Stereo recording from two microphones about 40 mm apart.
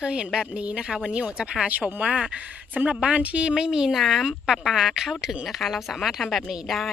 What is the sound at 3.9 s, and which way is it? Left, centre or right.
Speech, centre.